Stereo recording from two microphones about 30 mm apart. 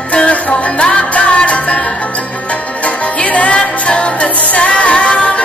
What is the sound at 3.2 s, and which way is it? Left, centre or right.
Music, left.